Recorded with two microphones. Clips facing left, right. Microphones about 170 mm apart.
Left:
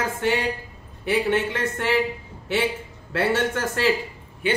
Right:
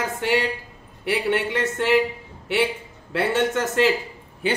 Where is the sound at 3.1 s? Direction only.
20° right (ahead or behind).